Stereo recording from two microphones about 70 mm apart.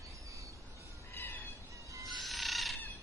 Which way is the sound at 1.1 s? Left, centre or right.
Left.